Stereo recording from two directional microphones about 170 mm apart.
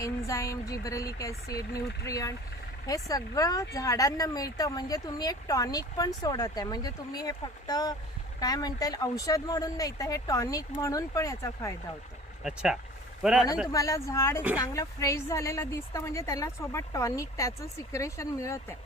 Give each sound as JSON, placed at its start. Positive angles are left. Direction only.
{"t": 0.0, "sound": "speech", "side_deg": 20}
{"t": 12.4, "sound": "speech", "side_deg": -5}
{"t": 13.7, "sound": "a woman's voice", "side_deg": 20}